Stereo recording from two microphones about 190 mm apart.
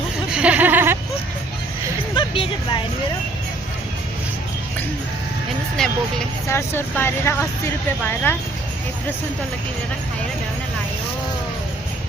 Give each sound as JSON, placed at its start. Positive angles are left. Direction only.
{"t": 0.3, "sound": "a sound", "side_deg": -5}
{"t": 2.1, "sound": "music", "side_deg": 25}
{"t": 5.7, "sound": "speech", "side_deg": 5}